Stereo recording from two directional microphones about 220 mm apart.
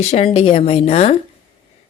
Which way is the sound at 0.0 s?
30° left (ahead or behind).